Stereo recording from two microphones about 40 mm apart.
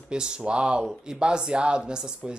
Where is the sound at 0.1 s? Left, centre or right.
Right.